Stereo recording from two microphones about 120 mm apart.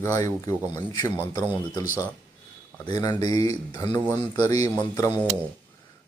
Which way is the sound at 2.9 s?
30° left (ahead or behind).